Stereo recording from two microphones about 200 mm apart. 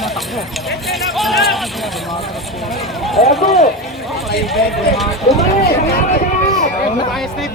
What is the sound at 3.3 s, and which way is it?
Speech, centre (ahead or behind).